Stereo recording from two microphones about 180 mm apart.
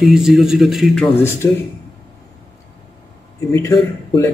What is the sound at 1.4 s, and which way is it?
Speech, 15° left (ahead or behind).